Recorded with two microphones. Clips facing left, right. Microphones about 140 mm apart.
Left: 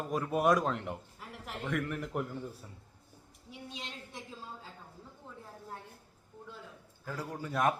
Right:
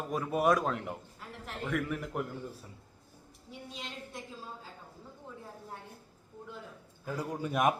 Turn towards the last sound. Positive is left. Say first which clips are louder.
# right 2 dB
turn(degrees=-15)  # may be behind; listen again after turning